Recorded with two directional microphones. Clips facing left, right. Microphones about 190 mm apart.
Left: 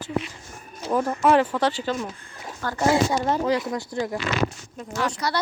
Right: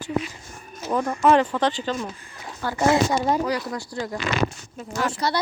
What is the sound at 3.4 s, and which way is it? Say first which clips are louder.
Speech: left 2 dB; 20° left (ahead or behind).